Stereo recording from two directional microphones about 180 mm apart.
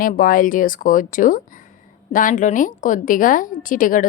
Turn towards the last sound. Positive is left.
turn(degrees=50)  # may be behind; listen again after turning